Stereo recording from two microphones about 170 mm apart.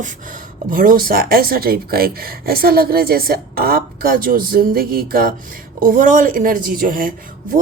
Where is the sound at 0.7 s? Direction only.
60° right (ahead or behind).